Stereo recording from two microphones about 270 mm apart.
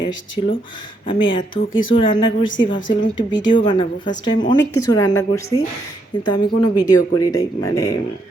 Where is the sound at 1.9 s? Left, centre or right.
Centre.